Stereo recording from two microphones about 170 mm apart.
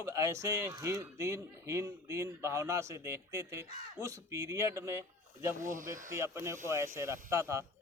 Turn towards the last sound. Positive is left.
turn(degrees=-15)  # may be behind; listen again after turning